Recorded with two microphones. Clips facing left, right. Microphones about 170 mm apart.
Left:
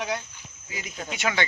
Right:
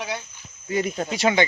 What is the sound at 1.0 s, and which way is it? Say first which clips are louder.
Speech: right 3 dB; 35° right (ahead or behind).